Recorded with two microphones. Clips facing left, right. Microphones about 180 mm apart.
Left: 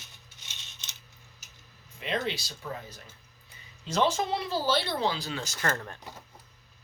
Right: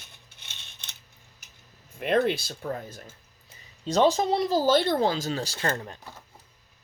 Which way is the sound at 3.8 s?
35° right (ahead or behind).